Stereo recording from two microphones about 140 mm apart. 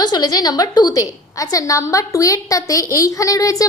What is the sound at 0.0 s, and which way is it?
A woman's voice, 30° left (ahead or behind).